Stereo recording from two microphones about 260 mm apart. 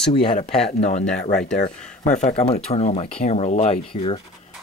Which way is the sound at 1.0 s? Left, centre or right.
Centre.